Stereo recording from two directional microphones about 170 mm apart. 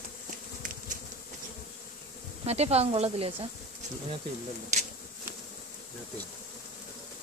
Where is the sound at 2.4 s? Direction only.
40° right (ahead or behind).